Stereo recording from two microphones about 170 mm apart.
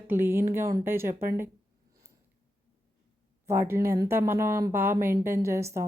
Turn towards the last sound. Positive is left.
turn(degrees=-15)  # may be behind; listen again after turning